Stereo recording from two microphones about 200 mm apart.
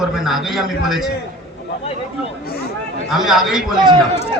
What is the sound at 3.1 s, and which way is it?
Speech, centre (ahead or behind).